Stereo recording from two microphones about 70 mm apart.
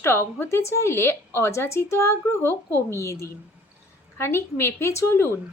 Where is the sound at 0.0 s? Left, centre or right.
Left.